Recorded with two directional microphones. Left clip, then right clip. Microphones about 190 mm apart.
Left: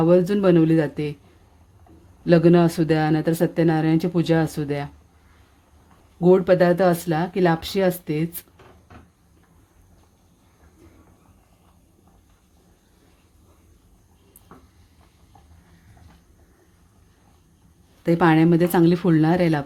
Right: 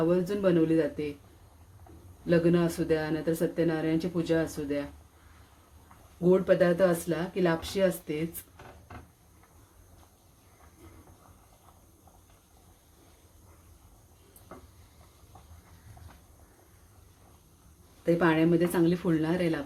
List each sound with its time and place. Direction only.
0.0 s speech: 60° left (ahead or behind)
2.2 s speech: 60° left (ahead or behind)
6.2 s speech: 55° left (ahead or behind)
18.0 s speech: 60° left (ahead or behind)